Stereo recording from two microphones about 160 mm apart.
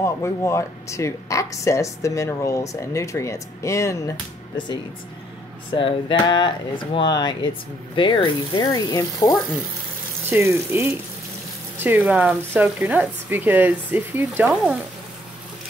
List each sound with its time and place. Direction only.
0.0 s speech: 15° left (ahead or behind)
5.8 s speech: 30° left (ahead or behind)
10.3 s speech: 15° right (ahead or behind)